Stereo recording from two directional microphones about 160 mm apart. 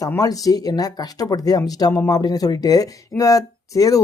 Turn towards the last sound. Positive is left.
turn(degrees=20)  # may be behind; listen again after turning